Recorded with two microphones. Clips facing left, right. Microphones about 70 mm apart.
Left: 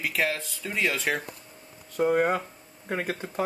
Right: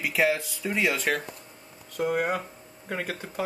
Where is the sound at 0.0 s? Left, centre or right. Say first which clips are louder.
Right 3 dB; centre.